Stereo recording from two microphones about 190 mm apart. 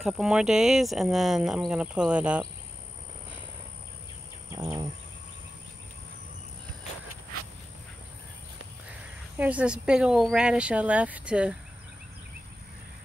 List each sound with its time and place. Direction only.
0.0 s speech: 5° right (ahead or behind)
4.5 s bird: 15° right (ahead or behind)
9.4 s speech: 5° right (ahead or behind)